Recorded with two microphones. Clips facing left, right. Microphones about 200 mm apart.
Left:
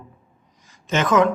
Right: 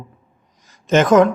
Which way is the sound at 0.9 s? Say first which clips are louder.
Right 6 dB; 45° right (ahead or behind).